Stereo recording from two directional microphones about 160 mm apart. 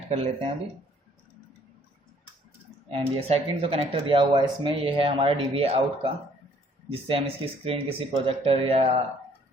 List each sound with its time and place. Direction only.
0.1 s speech: 35° right (ahead or behind)
2.9 s speech: 40° right (ahead or behind)
7.1 s speech: 35° right (ahead or behind)